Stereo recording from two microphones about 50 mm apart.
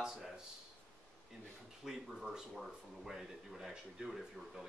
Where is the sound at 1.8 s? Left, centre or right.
Centre.